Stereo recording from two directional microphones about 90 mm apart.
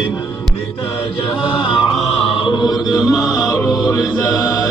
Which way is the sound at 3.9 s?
40° left (ahead or behind).